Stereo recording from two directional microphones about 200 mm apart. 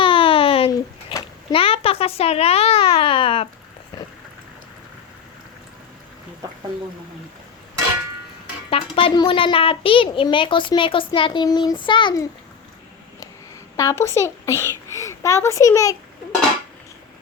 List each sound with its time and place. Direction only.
0.0 s a sound: 25° left (ahead or behind)
1.1 s a child's voice: 25° left (ahead or behind)
8.7 s a child's voice: 25° left (ahead or behind)
13.7 s a child's voice: 15° left (ahead or behind)